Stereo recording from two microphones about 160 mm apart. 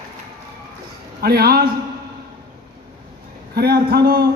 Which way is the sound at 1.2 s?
75° right (ahead or behind).